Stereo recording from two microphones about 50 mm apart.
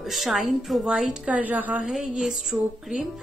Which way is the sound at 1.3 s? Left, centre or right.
Right.